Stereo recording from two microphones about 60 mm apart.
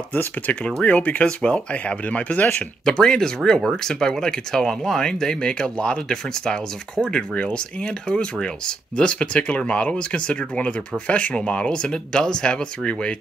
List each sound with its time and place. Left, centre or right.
0.1 s speech: left
2.8 s speech: centre